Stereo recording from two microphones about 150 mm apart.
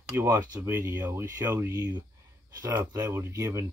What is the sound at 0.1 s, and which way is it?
Speech, 15° right (ahead or behind).